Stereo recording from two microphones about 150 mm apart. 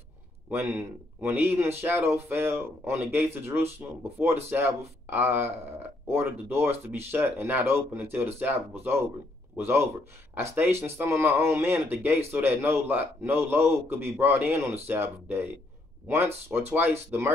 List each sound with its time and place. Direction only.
0.5 s a man's voice: 15° right (ahead or behind)